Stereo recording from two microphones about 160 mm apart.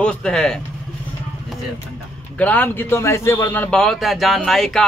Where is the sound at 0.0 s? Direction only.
5° left (ahead or behind).